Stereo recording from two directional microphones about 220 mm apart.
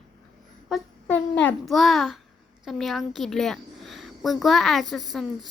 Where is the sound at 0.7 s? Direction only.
5° left (ahead or behind).